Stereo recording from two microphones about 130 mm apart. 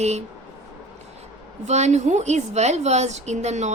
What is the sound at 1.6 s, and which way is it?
A woman's voice, 60° right (ahead or behind).